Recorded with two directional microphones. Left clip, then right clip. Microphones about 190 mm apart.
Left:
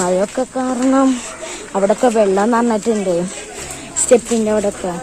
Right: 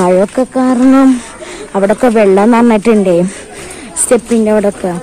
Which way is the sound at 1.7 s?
15° right (ahead or behind).